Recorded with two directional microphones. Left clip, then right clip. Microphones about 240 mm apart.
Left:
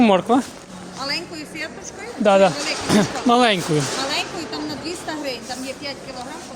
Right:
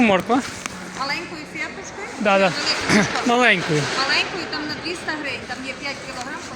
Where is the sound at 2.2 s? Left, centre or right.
Left.